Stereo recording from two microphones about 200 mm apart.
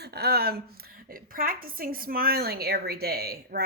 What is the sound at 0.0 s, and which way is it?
Speech, 55° right (ahead or behind).